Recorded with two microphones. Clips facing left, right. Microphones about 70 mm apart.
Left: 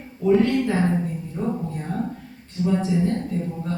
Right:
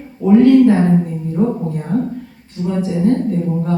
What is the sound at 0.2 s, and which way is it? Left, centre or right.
Speech, right.